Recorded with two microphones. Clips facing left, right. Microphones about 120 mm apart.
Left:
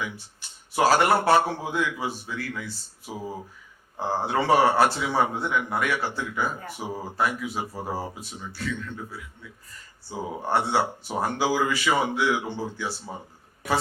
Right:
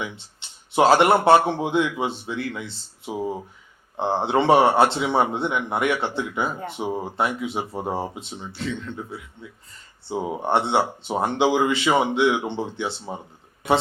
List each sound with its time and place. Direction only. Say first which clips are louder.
0.0 s speech: right 2 dB; 25° right (ahead or behind)